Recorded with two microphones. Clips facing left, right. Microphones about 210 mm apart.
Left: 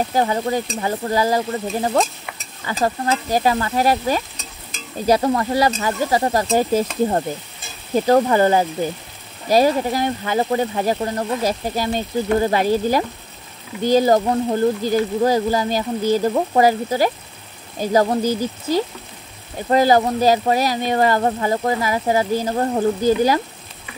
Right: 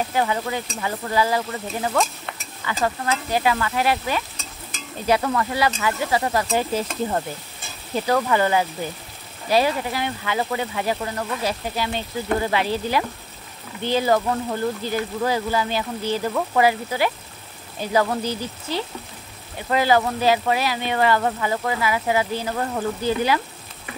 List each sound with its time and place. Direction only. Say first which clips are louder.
0.1 s speech: left 4 dB; 40° left (ahead or behind)